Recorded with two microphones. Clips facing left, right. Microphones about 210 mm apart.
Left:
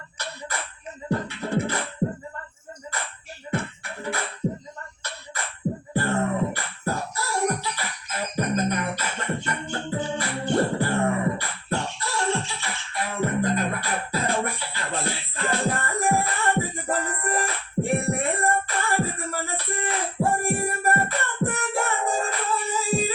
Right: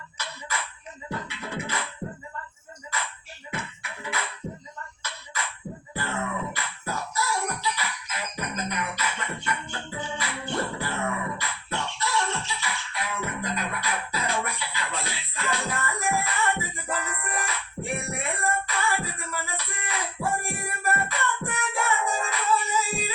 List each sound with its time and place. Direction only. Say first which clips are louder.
0.2 s beatboxing: left 2 dB; 40° left (ahead or behind)
3.5 s music: left 7 dB; 40° left (ahead or behind)
5.9 s music: left 6 dB; 45° left (ahead or behind)